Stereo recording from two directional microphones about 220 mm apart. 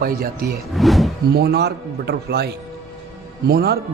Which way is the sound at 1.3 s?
45° right (ahead or behind).